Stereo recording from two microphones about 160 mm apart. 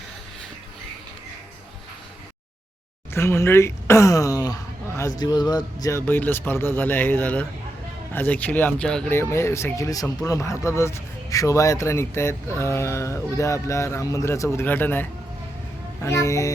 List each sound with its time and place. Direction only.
3.1 s speech: 15° left (ahead or behind)
6.1 s speech: 10° left (ahead or behind)
9.1 s speech: 15° left (ahead or behind)
16.0 s speech: 20° left (ahead or behind)